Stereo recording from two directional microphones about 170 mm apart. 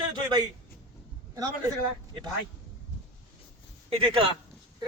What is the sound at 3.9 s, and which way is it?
Speech, 35° right (ahead or behind).